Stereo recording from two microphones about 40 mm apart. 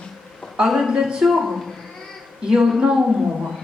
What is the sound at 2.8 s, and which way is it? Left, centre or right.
Speech, right.